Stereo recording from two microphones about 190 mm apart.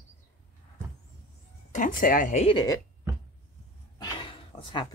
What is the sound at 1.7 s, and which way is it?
Speech, 45° left (ahead or behind).